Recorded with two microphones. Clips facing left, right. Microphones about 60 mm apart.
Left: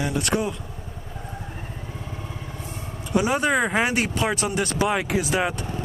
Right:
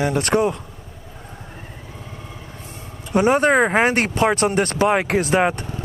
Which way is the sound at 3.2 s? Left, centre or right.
Right.